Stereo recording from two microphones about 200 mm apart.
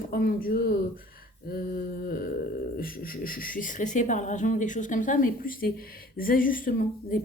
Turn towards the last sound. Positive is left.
turn(degrees=45)  # may be behind; listen again after turning